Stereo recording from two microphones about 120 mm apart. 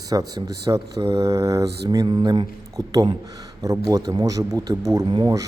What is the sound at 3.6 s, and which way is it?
Speech, 30° right (ahead or behind).